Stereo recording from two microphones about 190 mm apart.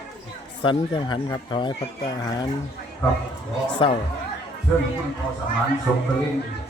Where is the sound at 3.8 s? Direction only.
30° left (ahead or behind).